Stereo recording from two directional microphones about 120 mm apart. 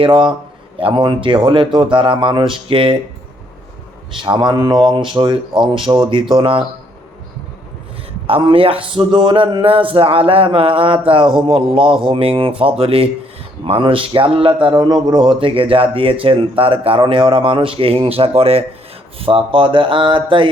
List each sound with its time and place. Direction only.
0.0 s speech: 45° right (ahead or behind)
4.2 s speech: 40° right (ahead or behind)
8.3 s speech: 45° right (ahead or behind)